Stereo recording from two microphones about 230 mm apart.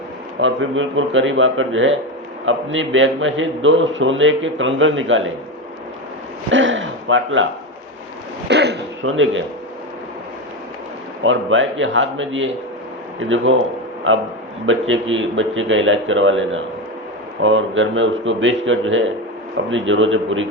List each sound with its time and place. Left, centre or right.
0.4 s a man's voice: right
6.5 s a sound: right
8.4 s speech: right
9.0 s a man's voice: right
11.2 s a man's voice: right